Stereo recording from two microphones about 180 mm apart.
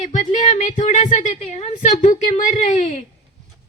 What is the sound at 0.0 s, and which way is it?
A woman's voice, 40° left (ahead or behind).